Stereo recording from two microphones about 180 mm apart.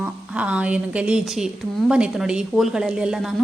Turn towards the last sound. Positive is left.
turn(degrees=-5)  # may be behind; listen again after turning